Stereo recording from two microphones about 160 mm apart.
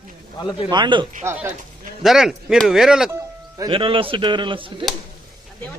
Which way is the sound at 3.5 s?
30° right (ahead or behind).